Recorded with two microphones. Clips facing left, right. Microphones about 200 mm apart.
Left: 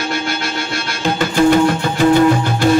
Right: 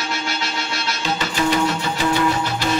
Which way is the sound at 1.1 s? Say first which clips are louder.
Left 9 dB; 50° left (ahead or behind).